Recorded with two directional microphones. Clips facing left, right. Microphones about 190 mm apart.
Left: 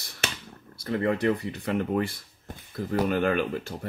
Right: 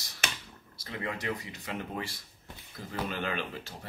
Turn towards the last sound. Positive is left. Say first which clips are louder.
# left 10 dB
turn(degrees=50)  # may be behind; listen again after turning